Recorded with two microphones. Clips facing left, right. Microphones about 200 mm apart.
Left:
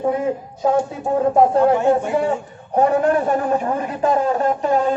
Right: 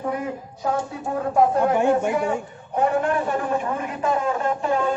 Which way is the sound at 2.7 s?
40° left (ahead or behind).